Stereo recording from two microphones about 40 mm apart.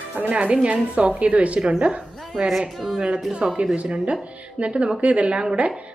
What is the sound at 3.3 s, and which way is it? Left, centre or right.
A woman's voice, right.